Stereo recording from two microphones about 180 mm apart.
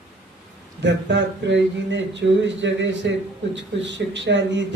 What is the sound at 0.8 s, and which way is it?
Speech, 80° right.